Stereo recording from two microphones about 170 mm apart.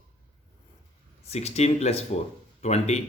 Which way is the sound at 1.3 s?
40° left (ahead or behind).